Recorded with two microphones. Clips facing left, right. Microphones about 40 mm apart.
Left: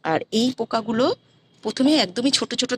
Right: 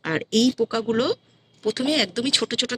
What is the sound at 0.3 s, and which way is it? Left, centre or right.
Speech, right.